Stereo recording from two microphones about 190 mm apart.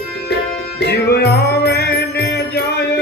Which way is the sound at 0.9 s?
60° left (ahead or behind).